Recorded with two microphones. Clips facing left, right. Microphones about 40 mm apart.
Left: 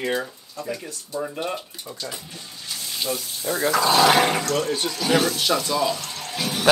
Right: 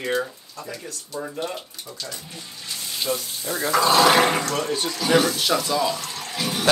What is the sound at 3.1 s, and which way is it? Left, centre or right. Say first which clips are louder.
Speech: right 3 dB; right.